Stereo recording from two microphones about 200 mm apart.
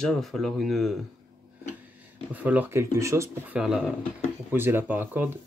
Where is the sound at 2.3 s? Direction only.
10° right (ahead or behind).